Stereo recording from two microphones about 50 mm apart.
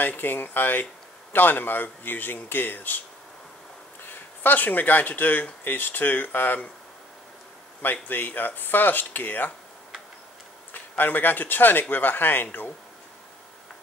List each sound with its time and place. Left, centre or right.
0.0 s speech: left
4.0 s speech: left
7.8 s speech: left
10.7 s speech: left